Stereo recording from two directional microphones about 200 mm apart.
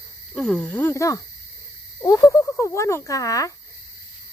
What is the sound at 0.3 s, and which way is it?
Speech, 5° left (ahead or behind).